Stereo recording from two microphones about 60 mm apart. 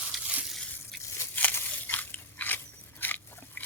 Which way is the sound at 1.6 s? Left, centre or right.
Left.